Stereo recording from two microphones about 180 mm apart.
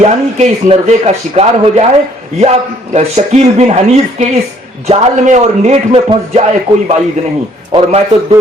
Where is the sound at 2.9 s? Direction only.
40° right (ahead or behind).